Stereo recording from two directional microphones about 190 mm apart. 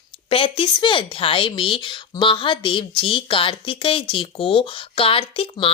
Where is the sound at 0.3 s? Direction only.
30° left (ahead or behind).